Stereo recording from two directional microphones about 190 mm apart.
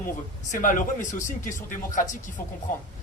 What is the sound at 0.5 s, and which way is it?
Speech, 45° left (ahead or behind).